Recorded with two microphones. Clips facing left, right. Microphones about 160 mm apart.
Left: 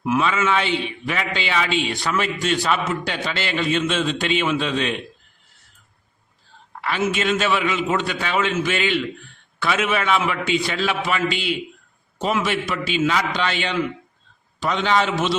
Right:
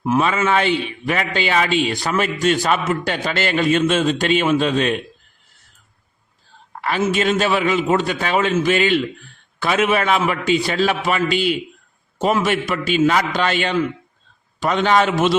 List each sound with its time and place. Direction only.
0.2 s a man's voice: 45° right (ahead or behind)
6.8 s a man's voice: 40° right (ahead or behind)